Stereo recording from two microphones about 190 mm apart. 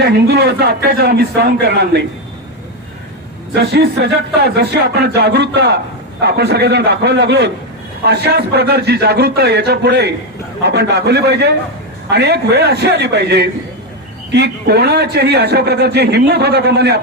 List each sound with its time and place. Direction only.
0.3 s a man's voice: 60° right (ahead or behind)
3.5 s a man's voice: 60° right (ahead or behind)